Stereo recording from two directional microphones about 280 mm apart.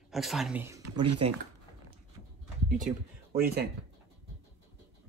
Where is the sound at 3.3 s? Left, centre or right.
Right.